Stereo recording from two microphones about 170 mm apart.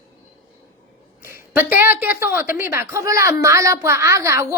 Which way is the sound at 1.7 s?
10° right (ahead or behind).